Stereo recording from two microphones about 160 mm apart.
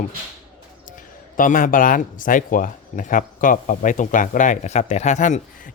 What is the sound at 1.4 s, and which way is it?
Speech, 55° left (ahead or behind).